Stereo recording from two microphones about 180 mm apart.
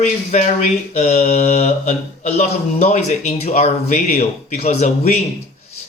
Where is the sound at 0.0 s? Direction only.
40° left (ahead or behind).